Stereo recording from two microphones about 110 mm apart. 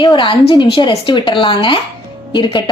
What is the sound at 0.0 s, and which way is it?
A woman's voice, 50° left (ahead or behind).